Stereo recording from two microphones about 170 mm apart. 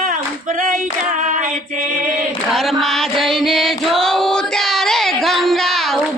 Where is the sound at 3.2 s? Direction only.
Centre (ahead or behind).